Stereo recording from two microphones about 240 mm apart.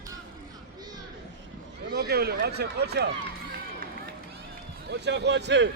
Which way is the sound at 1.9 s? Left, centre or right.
Right.